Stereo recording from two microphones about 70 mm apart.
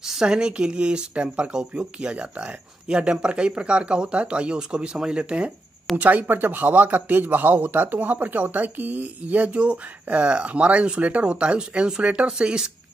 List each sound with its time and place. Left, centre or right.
0.0 s speech: centre